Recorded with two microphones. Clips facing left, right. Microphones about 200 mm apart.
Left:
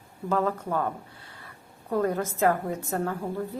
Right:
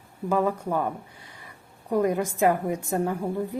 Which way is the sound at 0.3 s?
15° right (ahead or behind).